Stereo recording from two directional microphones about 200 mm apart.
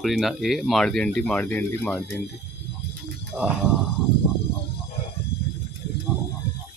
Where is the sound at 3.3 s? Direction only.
5° right (ahead or behind).